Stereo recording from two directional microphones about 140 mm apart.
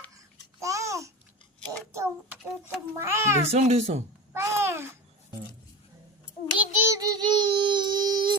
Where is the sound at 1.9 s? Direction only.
20° right (ahead or behind).